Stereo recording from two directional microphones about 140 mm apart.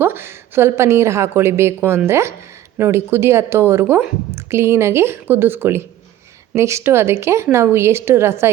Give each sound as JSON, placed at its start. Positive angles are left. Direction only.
{"t": 0.0, "sound": "a woman's voice", "side_deg": -15}